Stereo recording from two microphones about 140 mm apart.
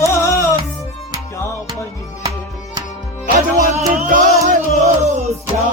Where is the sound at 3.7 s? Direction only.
70° right (ahead or behind).